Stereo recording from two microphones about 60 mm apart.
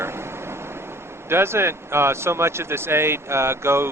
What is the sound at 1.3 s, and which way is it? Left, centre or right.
Speech, right.